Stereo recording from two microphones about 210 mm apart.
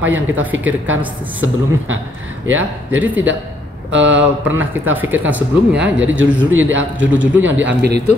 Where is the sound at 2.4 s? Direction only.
70° right (ahead or behind).